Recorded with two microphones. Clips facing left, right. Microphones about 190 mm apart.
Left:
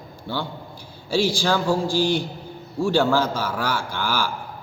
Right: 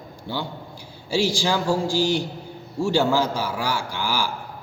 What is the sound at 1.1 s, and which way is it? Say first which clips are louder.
A man's voice: left 1 dB; 15° right (ahead or behind).